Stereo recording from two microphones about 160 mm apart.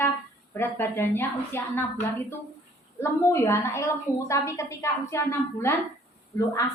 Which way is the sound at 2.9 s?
15° left (ahead or behind).